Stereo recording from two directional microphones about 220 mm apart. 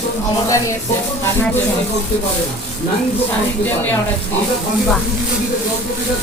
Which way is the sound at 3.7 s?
10° left (ahead or behind).